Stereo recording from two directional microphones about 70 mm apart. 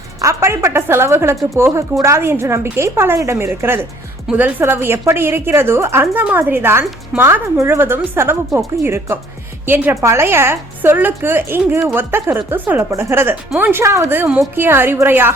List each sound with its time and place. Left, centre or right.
0.2 s a woman's voice: right
6.1 s a woman's voice: right
9.9 s a woman's voice: right
13.8 s a woman's voice: right
14.3 s a woman's voice: right